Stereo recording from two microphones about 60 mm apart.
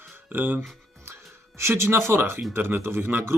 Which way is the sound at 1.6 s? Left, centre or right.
Right.